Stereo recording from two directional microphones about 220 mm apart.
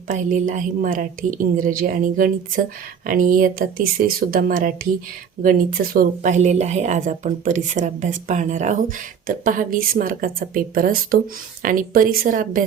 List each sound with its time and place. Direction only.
0.1 s a woman's voice: 35° right (ahead or behind)